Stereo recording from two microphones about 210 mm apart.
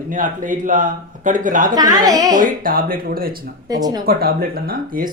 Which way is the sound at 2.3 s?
40° right (ahead or behind).